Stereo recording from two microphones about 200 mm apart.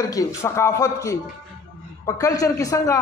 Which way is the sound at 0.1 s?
15° left (ahead or behind).